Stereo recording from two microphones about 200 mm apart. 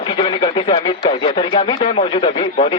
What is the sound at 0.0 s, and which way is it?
A man's voice, 25° left (ahead or behind).